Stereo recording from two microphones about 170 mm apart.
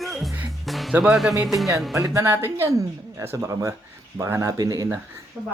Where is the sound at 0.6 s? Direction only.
Centre (ahead or behind).